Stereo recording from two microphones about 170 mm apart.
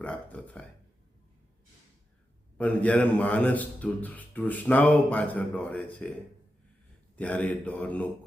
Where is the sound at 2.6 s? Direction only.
10° left (ahead or behind).